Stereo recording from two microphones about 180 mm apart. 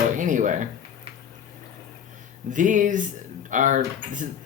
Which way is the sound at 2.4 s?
45° right (ahead or behind).